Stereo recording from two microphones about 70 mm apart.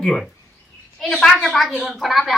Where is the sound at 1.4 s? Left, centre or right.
Centre.